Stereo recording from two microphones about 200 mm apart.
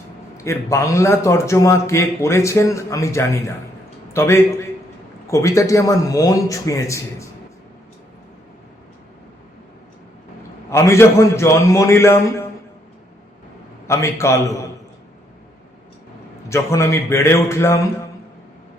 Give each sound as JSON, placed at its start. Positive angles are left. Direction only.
{"t": 0.3, "sound": "a man's voice", "side_deg": 15}
{"t": 10.7, "sound": "a man's voice", "side_deg": 15}
{"t": 13.8, "sound": "a man's voice", "side_deg": 15}
{"t": 16.5, "sound": "a man's voice", "side_deg": 15}